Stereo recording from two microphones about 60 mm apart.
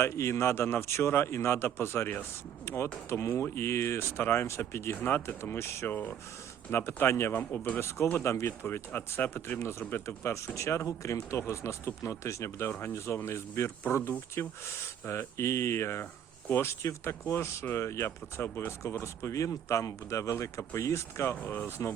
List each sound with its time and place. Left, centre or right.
0.0 s speech: left
4.9 s speech: left
7.3 s speech: left
8.2 s speech: left
8.6 s speech: left
10.3 s speech: left
21.2 s speech: left